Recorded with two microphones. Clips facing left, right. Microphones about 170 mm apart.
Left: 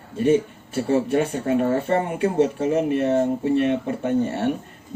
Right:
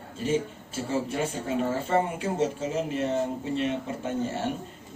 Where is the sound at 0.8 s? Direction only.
65° left (ahead or behind).